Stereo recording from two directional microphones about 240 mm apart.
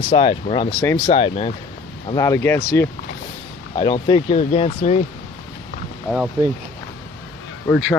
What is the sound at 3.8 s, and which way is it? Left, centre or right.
Speech, centre.